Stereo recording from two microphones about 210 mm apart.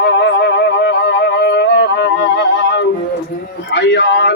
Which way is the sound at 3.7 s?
55° left (ahead or behind).